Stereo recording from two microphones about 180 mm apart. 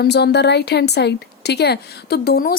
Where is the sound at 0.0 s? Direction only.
65° left (ahead or behind).